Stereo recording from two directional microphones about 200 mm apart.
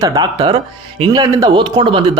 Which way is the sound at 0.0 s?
20° right (ahead or behind).